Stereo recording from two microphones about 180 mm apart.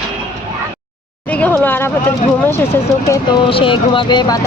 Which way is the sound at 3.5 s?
30° left (ahead or behind).